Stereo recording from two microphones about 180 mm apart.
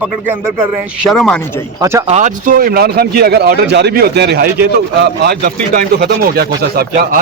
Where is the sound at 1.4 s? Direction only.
15° left (ahead or behind).